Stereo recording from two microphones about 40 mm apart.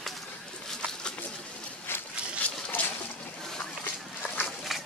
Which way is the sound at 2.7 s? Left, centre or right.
Left.